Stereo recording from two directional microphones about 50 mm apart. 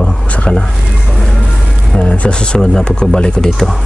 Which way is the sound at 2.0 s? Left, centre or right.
Left.